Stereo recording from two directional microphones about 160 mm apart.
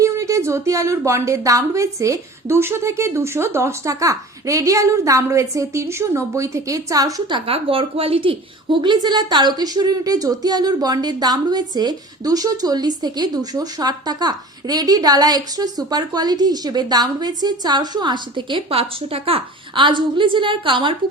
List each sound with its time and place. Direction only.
0.0 s a woman's voice: 20° right (ahead or behind)